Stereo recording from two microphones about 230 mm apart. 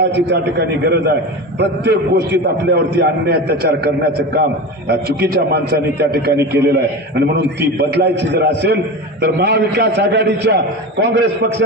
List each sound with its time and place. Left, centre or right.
0.3 s a man's voice: right